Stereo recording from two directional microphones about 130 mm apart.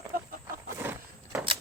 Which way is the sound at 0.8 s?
15° right (ahead or behind).